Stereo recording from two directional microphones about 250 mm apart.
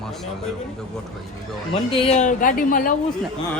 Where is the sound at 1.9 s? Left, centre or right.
Left.